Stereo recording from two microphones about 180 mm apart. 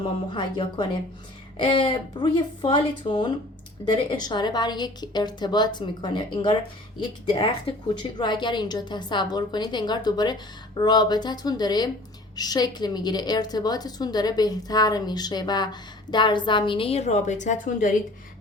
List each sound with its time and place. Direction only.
0.0 s a woman's voice: 25° left (ahead or behind); by 17.9 s 45° left (ahead or behind)